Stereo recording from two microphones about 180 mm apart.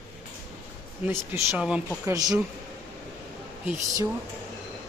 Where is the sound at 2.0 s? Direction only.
20° right (ahead or behind).